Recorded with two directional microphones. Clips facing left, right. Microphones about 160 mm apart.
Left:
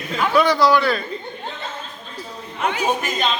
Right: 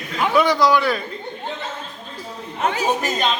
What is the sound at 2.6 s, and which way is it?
Speech, 35° right (ahead or behind).